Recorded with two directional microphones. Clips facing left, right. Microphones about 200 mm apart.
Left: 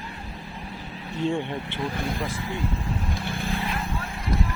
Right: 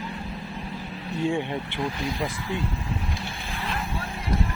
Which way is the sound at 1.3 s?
15° right (ahead or behind).